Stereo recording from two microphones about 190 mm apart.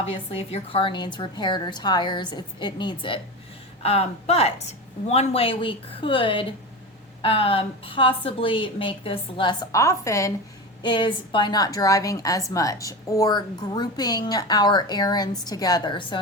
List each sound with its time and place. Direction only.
0.0 s a woman's voice: 30° left (ahead or behind)